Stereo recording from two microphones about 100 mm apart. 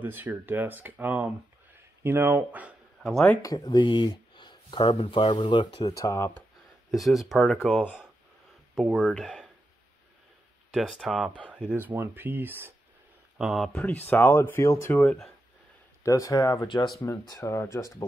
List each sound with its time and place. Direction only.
0.0 s speech: 20° right (ahead or behind)
3.0 s speech: centre (ahead or behind)
3.4 s speech: 40° left (ahead or behind)
5.9 s speech: 30° left (ahead or behind)
6.9 s speech: centre (ahead or behind)
8.7 s speech: centre (ahead or behind)
10.7 s speech: centre (ahead or behind)
11.7 s speech: 20° right (ahead or behind)
13.4 s speech: centre (ahead or behind)
13.8 s speech: 20° left (ahead or behind); by 16.9 s 45° left (ahead or behind)
17.2 s speech: 35° left (ahead or behind)